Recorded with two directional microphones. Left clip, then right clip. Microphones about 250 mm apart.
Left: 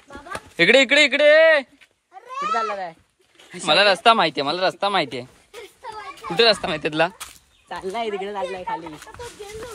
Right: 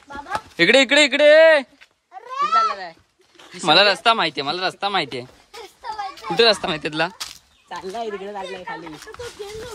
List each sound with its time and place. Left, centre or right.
0.6 s speech: centre
2.5 s a sound: left
3.6 s speech: centre
8.0 s speech: left